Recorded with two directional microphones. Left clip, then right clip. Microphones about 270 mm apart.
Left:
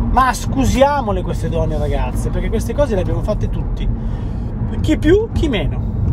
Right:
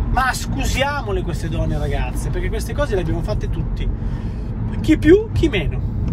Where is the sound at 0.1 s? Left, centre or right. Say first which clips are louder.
Left 5 dB; centre.